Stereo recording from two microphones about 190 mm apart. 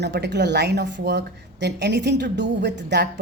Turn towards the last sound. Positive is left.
turn(degrees=-65)  # may be behind; listen again after turning